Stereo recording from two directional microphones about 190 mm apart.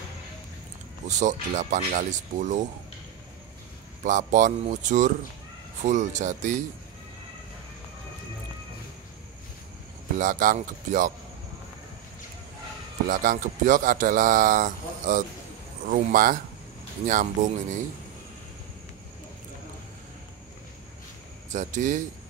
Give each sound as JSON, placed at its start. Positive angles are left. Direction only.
{"t": 1.0, "sound": "speech", "side_deg": -40}
{"t": 4.0, "sound": "speech", "side_deg": -40}
{"t": 10.1, "sound": "speech", "side_deg": -45}
{"t": 13.1, "sound": "speech", "side_deg": -45}
{"t": 21.5, "sound": "speech", "side_deg": -40}